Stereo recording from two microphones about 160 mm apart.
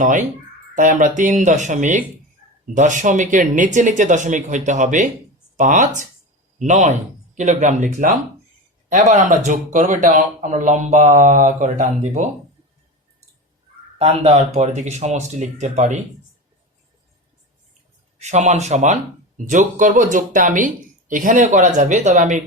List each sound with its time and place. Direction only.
0.0 s speech: 50° right (ahead or behind)
14.0 s speech: 45° right (ahead or behind)
18.2 s speech: 45° right (ahead or behind)